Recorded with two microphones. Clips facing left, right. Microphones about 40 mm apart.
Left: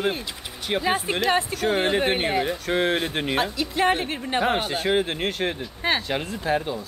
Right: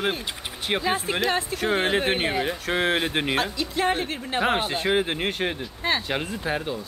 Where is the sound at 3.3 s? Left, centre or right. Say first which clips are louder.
Left 1 dB; centre.